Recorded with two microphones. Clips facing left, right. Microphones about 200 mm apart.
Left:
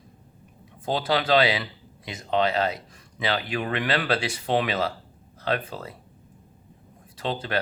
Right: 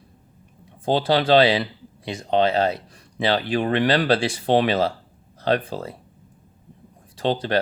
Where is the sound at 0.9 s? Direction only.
30° right (ahead or behind).